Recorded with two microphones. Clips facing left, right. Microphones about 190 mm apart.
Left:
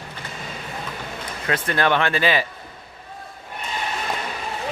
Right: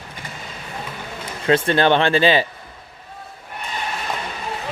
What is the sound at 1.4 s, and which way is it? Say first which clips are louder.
Speech: right 6 dB; 30° right (ahead or behind).